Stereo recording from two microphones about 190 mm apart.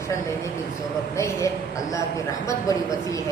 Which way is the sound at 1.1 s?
15° left (ahead or behind).